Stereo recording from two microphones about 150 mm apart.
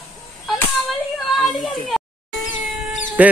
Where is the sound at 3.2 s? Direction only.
10° right (ahead or behind).